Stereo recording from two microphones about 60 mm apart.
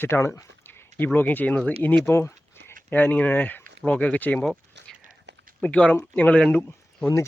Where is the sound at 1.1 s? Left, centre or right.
Left.